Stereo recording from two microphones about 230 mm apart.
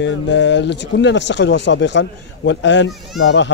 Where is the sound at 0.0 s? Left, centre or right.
Left.